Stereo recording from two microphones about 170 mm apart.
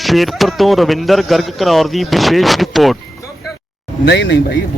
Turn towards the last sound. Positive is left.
turn(degrees=85)